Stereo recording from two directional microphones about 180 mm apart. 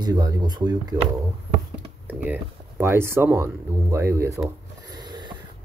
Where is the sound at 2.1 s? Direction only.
10° right (ahead or behind).